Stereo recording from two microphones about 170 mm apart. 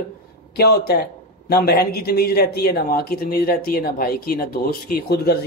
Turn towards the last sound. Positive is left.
turn(degrees=65)  # may be behind; listen again after turning